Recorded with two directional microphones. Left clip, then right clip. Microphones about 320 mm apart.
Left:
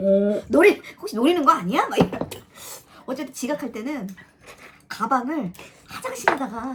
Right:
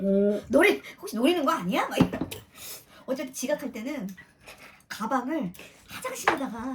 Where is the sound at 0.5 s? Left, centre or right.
Centre.